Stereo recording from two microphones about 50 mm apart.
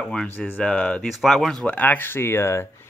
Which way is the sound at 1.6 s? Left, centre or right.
Left.